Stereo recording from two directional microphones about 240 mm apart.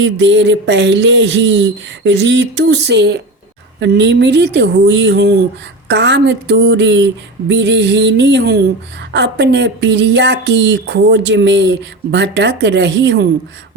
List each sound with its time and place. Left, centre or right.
0.0 s speech: right